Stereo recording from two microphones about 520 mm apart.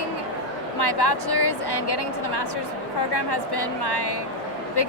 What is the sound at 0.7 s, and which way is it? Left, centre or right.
Speech, left.